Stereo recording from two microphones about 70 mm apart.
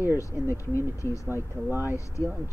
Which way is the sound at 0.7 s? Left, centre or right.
Left.